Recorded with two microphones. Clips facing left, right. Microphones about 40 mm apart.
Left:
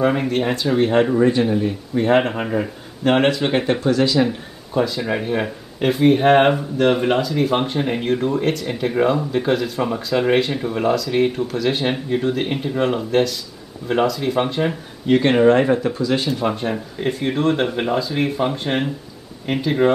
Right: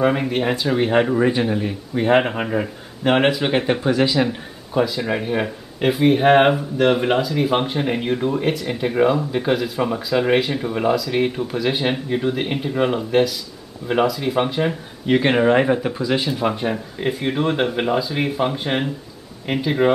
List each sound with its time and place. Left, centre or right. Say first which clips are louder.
0.0 s speech: even; centre
3.8 s speech: left 1 dB; centre